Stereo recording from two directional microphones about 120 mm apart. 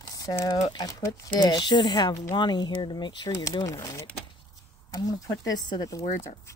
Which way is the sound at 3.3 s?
25° left (ahead or behind).